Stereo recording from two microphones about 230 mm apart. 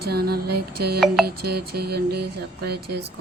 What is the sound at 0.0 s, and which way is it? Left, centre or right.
Speech, right.